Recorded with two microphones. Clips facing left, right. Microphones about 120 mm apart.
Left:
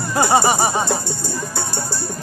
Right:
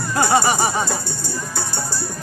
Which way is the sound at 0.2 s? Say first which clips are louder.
Left 1 dB; 20° left (ahead or behind).